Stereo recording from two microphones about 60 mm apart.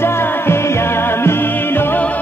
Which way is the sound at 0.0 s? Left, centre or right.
Left.